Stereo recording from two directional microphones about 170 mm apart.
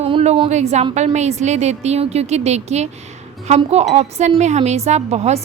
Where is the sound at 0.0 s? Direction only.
35° right (ahead or behind).